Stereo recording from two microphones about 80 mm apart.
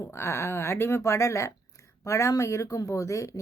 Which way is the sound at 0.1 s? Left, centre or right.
Left.